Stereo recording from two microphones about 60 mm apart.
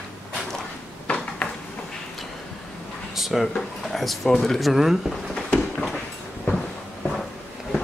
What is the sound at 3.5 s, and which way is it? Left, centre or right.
Speech, centre.